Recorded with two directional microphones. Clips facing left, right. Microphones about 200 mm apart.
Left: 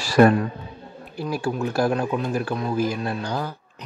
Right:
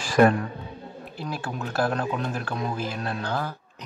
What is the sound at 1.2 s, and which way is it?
Speech, 10° left (ahead or behind).